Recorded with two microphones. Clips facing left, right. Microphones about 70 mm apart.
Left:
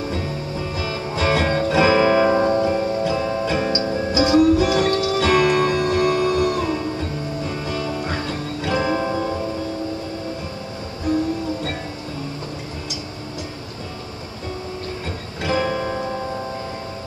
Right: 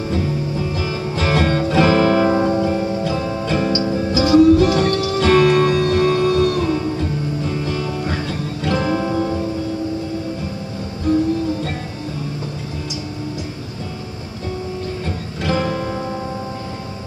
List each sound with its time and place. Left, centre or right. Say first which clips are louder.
1.1 s music: right 1 dB; centre
4.1 s music: right 3 dB; left
4.4 s music: right 5 dB; centre
8.3 s music: right 2 dB; centre
15.4 s music: right 1 dB; centre